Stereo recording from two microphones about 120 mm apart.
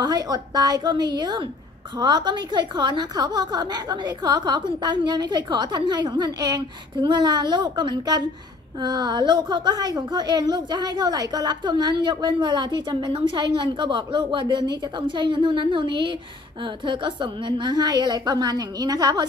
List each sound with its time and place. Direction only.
0.0 s a woman's voice: 35° right (ahead or behind)